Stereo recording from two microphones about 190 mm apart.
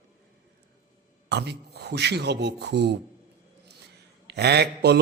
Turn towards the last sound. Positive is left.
turn(degrees=-60)  # may be behind; listen again after turning